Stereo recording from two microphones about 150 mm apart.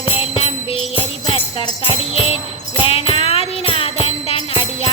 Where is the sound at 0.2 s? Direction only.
40° left (ahead or behind).